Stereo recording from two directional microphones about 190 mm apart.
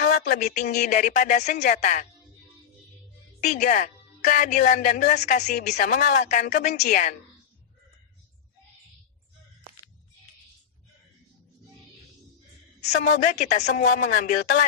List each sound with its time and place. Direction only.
0.0 s a woman's voice: 40° left (ahead or behind)
3.4 s a woman's voice: 40° left (ahead or behind)
13.4 s a woman's voice: 40° left (ahead or behind)